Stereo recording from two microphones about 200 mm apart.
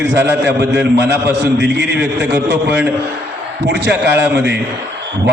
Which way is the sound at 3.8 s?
55° right (ahead or behind).